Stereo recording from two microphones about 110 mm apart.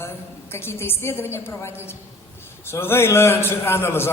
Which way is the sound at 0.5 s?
20° left (ahead or behind).